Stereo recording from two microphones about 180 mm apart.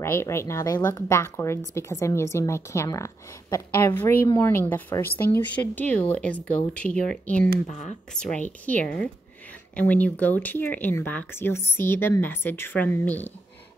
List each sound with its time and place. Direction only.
0.0 s speech: 15° left (ahead or behind)
7.6 s speech: 40° left (ahead or behind)
8.1 s speech: 5° left (ahead or behind)